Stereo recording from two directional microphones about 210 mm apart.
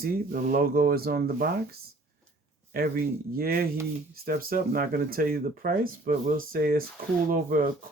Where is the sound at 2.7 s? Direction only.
45° right (ahead or behind).